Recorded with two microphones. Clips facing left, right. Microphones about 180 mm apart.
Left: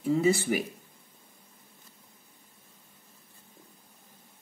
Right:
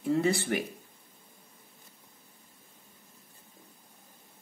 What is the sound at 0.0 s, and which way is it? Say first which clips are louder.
Speech: left 2 dB; centre (ahead or behind).